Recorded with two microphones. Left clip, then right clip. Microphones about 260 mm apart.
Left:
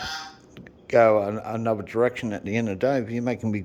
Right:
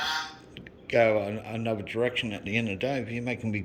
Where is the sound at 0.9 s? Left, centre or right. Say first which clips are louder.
Left 5 dB; centre.